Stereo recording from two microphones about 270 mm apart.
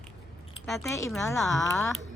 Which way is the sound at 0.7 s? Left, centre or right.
Centre.